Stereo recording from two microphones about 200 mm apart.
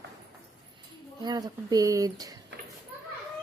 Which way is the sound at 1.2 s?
20° right (ahead or behind).